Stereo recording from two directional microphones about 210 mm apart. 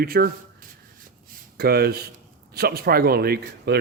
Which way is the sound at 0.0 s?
45° right (ahead or behind).